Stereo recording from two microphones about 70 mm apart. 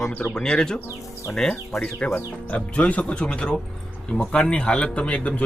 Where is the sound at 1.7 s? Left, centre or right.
Left.